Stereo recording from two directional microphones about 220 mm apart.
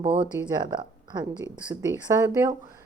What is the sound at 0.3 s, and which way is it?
A woman's voice, 20° right (ahead or behind).